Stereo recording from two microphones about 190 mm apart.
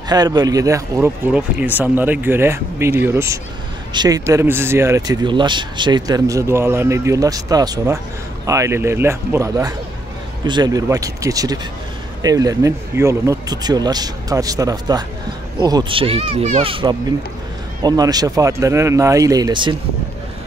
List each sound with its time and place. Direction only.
0.1 s speech: 20° right (ahead or behind)